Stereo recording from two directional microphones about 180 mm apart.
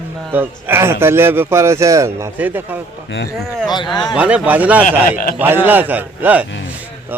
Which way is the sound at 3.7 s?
25° left (ahead or behind).